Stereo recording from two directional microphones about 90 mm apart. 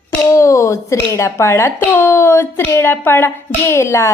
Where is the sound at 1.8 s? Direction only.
25° left (ahead or behind).